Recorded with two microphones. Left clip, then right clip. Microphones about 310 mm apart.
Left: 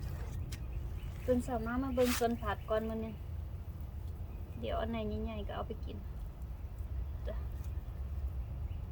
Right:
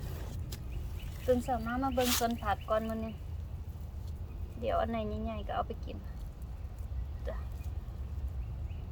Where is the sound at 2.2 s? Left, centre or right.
Centre.